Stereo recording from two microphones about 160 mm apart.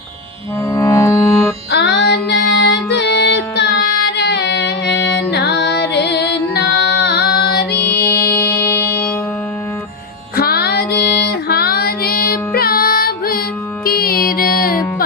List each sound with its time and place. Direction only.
0.7 s music: 20° left (ahead or behind)
1.7 s music: 90° left
7.9 s music: 75° left (ahead or behind)
8.5 s music: 10° left (ahead or behind)
10.3 s female singing: 75° left (ahead or behind)
13.8 s music: 70° left (ahead or behind)